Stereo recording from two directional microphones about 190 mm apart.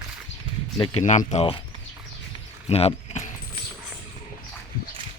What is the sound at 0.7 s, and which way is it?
Speech, 25° left (ahead or behind).